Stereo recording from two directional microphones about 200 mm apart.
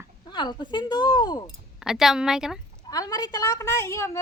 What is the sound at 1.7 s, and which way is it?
Speech, centre (ahead or behind).